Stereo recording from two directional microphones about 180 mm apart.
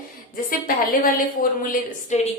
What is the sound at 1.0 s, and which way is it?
A woman's voice, 50° left (ahead or behind).